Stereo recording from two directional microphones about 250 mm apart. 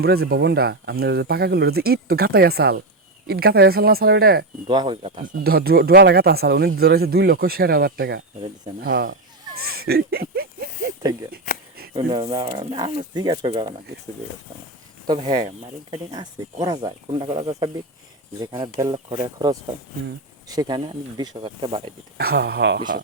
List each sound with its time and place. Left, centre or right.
0.0 s speech: right
4.7 s speech: centre
5.4 s speech: right
9.6 s a sound: right
11.9 s speech: centre
15.0 s speech: centre
22.2 s speech: right